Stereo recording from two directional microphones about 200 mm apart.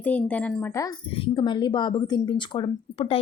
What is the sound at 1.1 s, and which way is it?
A woman's voice, 25° left (ahead or behind).